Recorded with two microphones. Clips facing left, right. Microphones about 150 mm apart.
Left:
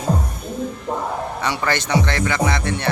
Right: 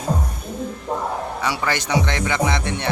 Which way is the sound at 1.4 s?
10° right (ahead or behind).